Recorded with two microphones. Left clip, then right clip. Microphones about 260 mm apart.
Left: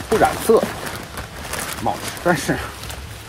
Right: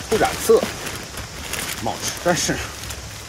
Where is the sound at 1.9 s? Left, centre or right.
Centre.